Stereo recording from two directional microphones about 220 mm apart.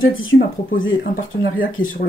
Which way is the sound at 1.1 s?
40° left (ahead or behind).